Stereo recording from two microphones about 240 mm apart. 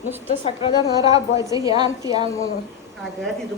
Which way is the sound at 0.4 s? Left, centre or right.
Left.